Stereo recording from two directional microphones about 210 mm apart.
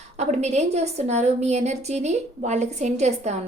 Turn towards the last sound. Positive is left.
turn(degrees=-35)  # may be behind; listen again after turning